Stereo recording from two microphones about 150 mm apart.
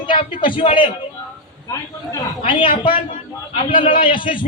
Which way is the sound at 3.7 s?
65° left (ahead or behind).